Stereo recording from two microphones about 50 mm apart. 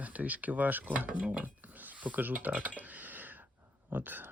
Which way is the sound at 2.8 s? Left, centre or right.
Right.